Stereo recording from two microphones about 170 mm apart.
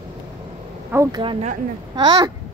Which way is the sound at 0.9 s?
20° right (ahead or behind).